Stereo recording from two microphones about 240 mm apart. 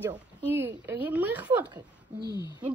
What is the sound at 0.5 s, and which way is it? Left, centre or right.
A woman's voice, centre.